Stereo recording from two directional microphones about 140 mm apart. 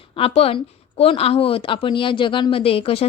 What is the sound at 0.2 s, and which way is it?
A woman's voice, 45° left (ahead or behind).